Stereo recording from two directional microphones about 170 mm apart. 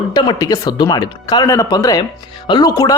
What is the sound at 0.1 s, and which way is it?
A man's voice, 25° left (ahead or behind).